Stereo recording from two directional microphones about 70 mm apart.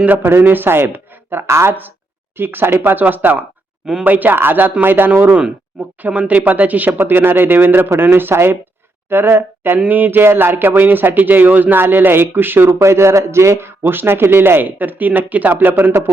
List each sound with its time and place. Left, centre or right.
0.3 s speech: right